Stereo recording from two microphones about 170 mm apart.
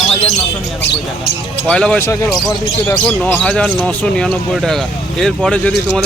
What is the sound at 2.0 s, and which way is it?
Speech, 20° left (ahead or behind).